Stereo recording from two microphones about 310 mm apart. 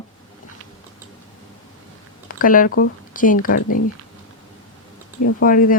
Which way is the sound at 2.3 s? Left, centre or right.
Left.